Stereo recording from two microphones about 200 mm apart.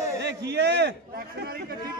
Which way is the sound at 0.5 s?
55° right (ahead or behind).